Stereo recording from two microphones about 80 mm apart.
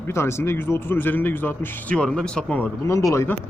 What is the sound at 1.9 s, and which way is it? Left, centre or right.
Speech, centre.